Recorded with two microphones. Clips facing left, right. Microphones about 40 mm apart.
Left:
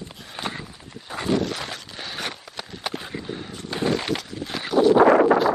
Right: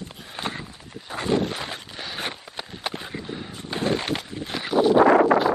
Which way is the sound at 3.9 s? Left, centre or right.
Centre.